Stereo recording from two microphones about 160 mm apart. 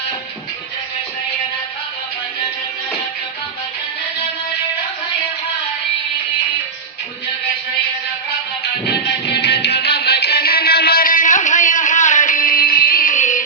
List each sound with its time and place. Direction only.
9.2 s music: 90° left; by 13.4 s 50° left (ahead or behind)